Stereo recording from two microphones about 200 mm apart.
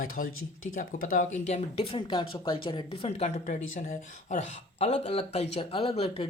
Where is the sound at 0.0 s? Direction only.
45° left (ahead or behind).